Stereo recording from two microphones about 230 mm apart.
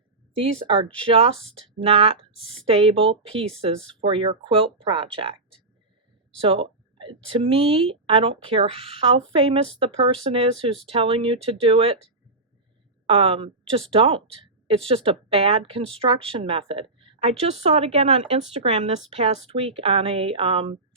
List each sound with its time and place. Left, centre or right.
0.7 s speech: right
6.4 s a woman's voice: right